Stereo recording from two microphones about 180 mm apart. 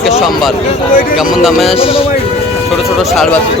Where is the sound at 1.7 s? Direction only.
30° left (ahead or behind).